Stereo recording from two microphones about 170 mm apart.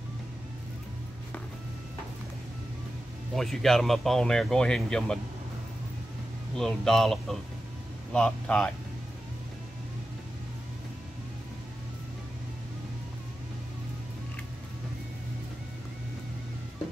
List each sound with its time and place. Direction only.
3.3 s speech: centre (ahead or behind)
6.5 s speech: 5° left (ahead or behind)